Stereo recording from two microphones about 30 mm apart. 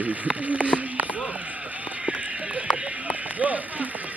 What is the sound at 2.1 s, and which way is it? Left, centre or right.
Run, right.